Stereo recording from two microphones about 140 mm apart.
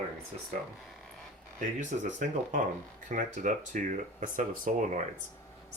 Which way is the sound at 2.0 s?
70° right (ahead or behind).